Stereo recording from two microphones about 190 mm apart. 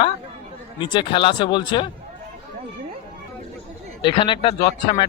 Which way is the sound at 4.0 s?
25° left (ahead or behind).